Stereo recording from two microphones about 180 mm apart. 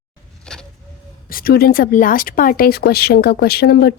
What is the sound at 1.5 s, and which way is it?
Speech, 55° left (ahead or behind).